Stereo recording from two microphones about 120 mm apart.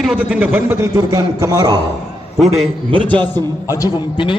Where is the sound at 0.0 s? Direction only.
10° right (ahead or behind); by 1.8 s 35° right (ahead or behind).